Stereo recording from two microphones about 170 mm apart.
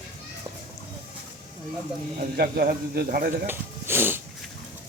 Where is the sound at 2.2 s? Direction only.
65° right (ahead or behind).